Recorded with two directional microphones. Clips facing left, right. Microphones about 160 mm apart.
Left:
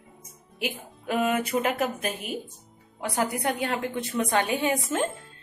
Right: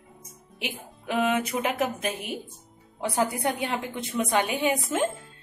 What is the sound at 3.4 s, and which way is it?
A woman's voice, 20° right (ahead or behind).